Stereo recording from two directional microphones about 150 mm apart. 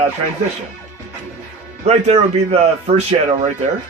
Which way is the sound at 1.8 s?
45° right (ahead or behind).